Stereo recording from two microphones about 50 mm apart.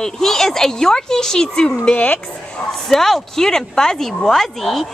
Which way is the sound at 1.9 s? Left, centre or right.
Left.